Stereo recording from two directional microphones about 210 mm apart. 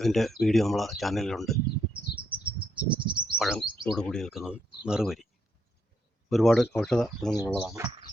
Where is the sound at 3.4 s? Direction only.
Centre (ahead or behind).